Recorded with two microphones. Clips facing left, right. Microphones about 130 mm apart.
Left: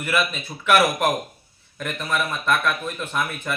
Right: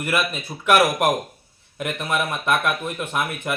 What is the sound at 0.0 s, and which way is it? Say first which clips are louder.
Speech: even; 15° right (ahead or behind).